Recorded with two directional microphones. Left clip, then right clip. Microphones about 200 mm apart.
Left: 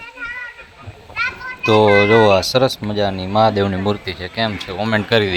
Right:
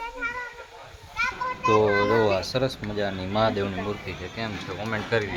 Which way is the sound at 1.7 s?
35° left (ahead or behind).